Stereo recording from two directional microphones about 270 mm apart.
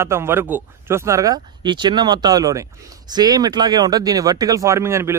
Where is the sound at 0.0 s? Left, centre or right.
Centre.